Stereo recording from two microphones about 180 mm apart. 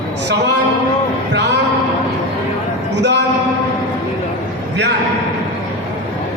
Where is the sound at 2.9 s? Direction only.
70° right (ahead or behind).